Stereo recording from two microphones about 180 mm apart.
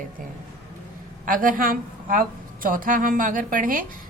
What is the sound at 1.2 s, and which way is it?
A woman's voice, 50° right (ahead or behind).